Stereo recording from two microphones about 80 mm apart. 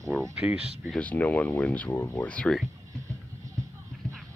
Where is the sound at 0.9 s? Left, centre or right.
Centre.